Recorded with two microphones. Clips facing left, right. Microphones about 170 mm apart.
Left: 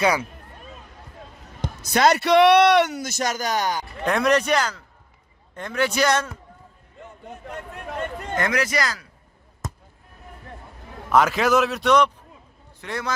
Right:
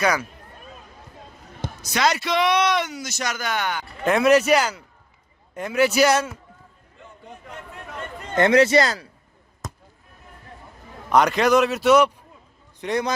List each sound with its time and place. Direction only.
0.0 s speech: 30° left (ahead or behind)
1.8 s a man's voice: 55° left (ahead or behind)
4.0 s a man's voice: 5° right (ahead or behind)
8.4 s speech: 25° right (ahead or behind)
11.1 s a man's voice: centre (ahead or behind)
12.8 s speech: 20° right (ahead or behind)